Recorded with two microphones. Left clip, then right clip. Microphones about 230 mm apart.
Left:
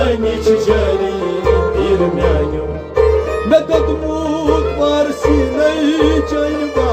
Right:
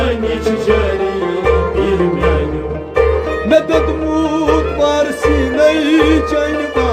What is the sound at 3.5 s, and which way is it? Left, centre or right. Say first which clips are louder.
Music: right 1 dB; right.